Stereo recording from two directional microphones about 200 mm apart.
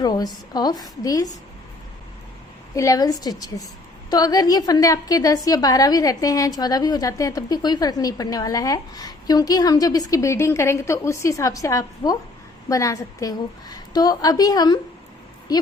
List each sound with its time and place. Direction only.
0.0 s a woman's voice: 20° left (ahead or behind)
2.7 s a woman's voice: 15° left (ahead or behind)